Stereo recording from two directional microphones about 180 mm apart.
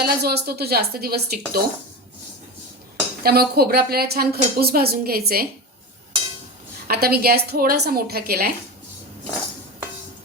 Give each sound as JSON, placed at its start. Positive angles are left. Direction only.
{"t": 0.0, "sound": "a woman's voice", "side_deg": -60}
{"t": 3.2, "sound": "a woman's voice", "side_deg": -60}
{"t": 6.8, "sound": "a woman's voice", "side_deg": -60}